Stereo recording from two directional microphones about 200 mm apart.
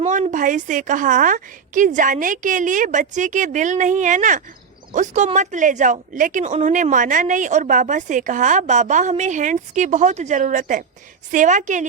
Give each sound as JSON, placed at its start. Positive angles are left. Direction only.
{"t": 0.0, "sound": "speech", "side_deg": -40}